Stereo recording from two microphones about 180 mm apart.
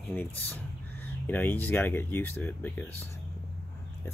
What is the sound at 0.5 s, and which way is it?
Speech, 10° left (ahead or behind).